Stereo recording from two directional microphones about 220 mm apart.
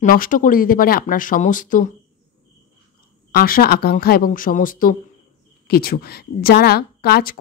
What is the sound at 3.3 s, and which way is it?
A woman's voice, 40° left (ahead or behind).